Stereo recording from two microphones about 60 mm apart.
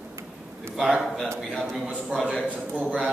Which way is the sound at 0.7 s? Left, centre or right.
Centre.